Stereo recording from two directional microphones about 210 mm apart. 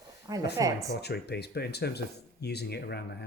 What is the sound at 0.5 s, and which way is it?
Speech, 15° right (ahead or behind).